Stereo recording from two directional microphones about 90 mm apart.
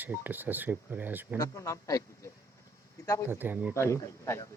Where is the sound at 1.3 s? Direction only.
40° left (ahead or behind).